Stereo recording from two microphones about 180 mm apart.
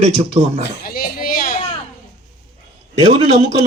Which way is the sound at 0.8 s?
55° left (ahead or behind).